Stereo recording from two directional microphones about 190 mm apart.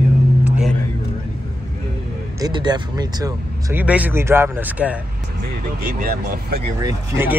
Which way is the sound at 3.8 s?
10° right (ahead or behind).